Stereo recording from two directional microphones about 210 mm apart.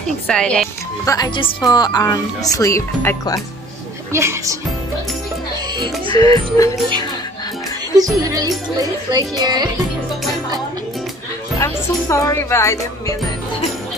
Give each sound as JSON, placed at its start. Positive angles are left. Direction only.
{"t": 0.3, "sound": "speech", "side_deg": 5}
{"t": 1.0, "sound": "a woman's voice", "side_deg": 15}
{"t": 4.1, "sound": "speech", "side_deg": -15}
{"t": 6.0, "sound": "a woman's voice", "side_deg": 15}
{"t": 7.9, "sound": "speech", "side_deg": -15}
{"t": 9.4, "sound": "music", "side_deg": -20}
{"t": 11.5, "sound": "a woman's voice", "side_deg": 15}